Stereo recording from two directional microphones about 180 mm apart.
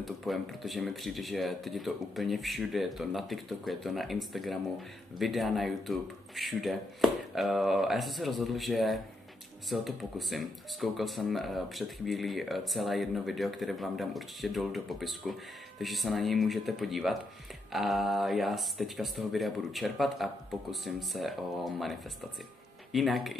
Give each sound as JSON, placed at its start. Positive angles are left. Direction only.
{"t": 0.0, "sound": "speech", "side_deg": 0}
{"t": 22.9, "sound": "speech", "side_deg": 0}